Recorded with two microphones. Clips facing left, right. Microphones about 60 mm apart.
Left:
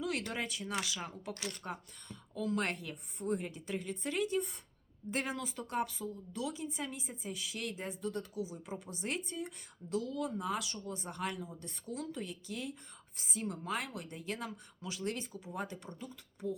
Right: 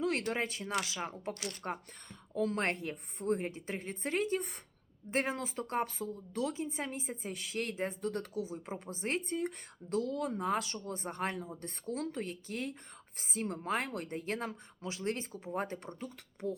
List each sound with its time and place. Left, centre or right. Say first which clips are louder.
0.0 s a woman's voice: right 4 dB; right
8.6 s a woman's voice: right 2 dB; right
9.3 s a woman's voice: right 6 dB; right